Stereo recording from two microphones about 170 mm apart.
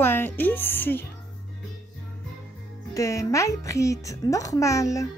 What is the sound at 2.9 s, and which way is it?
Speech, 20° left (ahead or behind).